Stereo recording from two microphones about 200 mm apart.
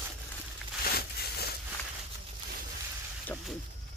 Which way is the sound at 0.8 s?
50° left (ahead or behind).